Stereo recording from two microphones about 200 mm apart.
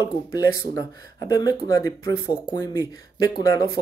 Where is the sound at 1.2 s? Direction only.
20° left (ahead or behind).